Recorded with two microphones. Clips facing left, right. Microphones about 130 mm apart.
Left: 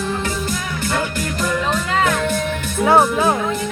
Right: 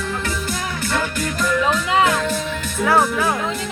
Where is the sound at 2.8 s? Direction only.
25° left (ahead or behind).